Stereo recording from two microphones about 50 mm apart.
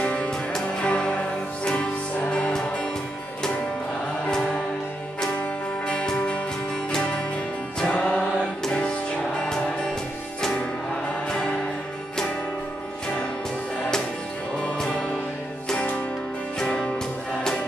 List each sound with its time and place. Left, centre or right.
0.0 s music: left
4.3 s music: centre
5.9 s music: centre
7.8 s music: centre
11.2 s music: centre
14.8 s music: centre
16.5 s music: centre